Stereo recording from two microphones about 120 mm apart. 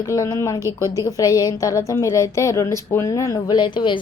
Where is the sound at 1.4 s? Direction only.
30° left (ahead or behind).